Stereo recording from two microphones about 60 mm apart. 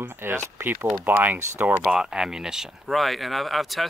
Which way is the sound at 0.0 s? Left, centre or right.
Right.